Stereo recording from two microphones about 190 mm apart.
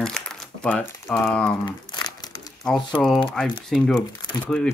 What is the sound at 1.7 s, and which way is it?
Crumpling, 20° left (ahead or behind).